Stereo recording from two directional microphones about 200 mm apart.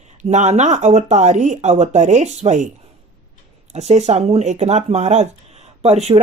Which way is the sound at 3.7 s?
35° right (ahead or behind).